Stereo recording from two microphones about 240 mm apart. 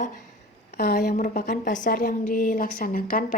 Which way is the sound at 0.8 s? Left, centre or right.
Left.